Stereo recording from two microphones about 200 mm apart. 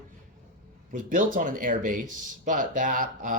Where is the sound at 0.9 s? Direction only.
40° right (ahead or behind).